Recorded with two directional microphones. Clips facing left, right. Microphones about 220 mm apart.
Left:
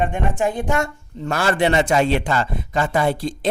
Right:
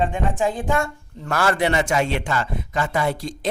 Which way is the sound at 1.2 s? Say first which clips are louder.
Left 2 dB; 25° left (ahead or behind).